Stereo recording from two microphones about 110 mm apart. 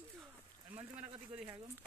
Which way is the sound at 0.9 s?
15° right (ahead or behind).